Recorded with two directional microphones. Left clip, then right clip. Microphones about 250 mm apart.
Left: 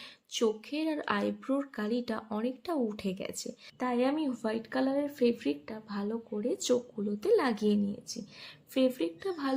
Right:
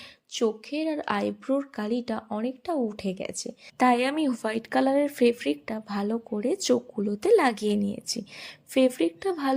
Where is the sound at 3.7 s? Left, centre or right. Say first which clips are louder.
Right 8 dB; right.